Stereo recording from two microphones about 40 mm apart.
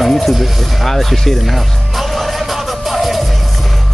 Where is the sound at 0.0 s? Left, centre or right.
Centre.